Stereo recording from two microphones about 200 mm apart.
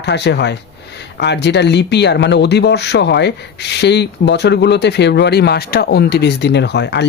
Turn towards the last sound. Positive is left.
turn(degrees=60)  # may be behind; listen again after turning